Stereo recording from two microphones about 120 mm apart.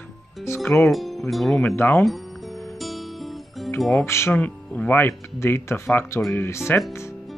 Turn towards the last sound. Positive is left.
turn(degrees=20)  # may be behind; listen again after turning